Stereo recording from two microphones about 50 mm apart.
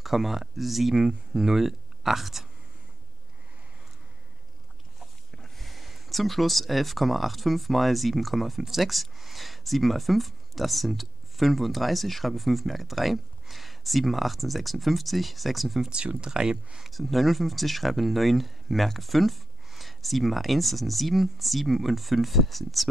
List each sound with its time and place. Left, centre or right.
0.0 s speech: centre
5.3 s a sound: centre
5.7 s speech: centre
15.9 s speech: right
16.9 s speech: centre